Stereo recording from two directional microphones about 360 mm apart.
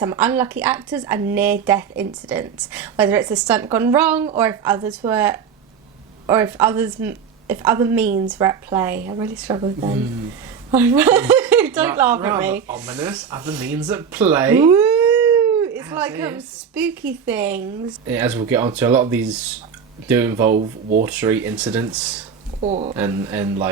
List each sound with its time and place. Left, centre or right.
0.0 s a woman's voice: centre
20.5 s speech: right
21.0 s speech: centre
22.6 s a woman's voice: centre
23.0 s a woman's voice: centre